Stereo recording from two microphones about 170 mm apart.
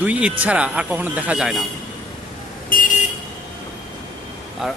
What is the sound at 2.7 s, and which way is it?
Vehicle, 55° left (ahead or behind).